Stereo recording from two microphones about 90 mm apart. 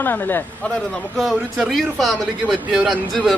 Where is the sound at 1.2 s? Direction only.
Centre (ahead or behind).